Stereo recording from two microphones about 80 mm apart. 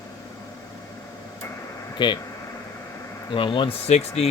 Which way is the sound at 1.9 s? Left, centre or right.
Left.